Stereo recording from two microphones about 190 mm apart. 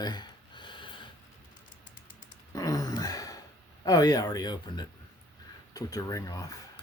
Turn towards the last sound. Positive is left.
turn(degrees=20)  # may be behind; listen again after turning